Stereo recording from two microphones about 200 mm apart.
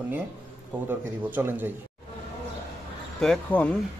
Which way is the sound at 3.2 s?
5° left (ahead or behind).